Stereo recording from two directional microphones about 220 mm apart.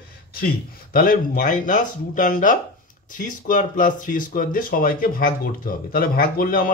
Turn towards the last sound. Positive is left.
turn(degrees=40)  # may be behind; listen again after turning